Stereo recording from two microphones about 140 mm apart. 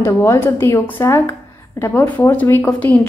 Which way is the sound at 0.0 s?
20° left (ahead or behind).